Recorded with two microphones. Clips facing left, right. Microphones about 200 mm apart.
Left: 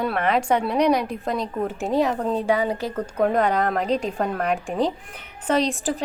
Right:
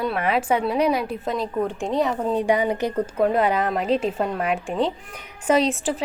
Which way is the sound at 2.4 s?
20° right (ahead or behind).